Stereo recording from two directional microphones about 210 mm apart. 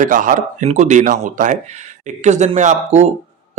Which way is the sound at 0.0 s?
40° right (ahead or behind).